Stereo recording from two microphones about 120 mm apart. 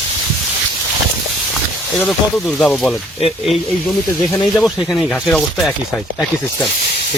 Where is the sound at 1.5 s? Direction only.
5° left (ahead or behind).